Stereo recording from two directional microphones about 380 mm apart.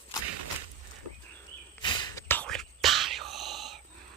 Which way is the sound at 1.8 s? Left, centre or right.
Centre.